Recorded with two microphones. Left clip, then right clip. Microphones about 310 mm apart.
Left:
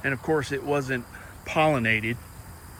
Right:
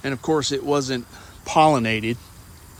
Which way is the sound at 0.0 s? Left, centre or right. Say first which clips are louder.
Right 3 dB; centre.